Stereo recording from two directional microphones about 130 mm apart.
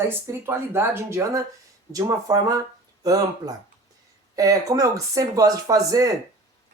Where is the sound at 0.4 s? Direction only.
20° right (ahead or behind).